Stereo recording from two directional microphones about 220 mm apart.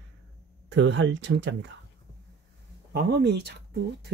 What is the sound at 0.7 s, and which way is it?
Speech, 55° right (ahead or behind).